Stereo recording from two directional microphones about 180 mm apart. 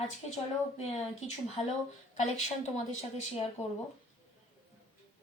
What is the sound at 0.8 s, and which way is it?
A woman's voice, 40° left (ahead or behind).